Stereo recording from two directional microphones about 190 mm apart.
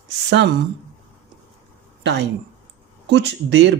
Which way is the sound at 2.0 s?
65° right (ahead or behind).